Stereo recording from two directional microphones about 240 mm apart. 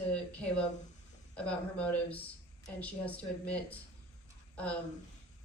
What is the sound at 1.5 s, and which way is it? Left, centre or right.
Speech, centre.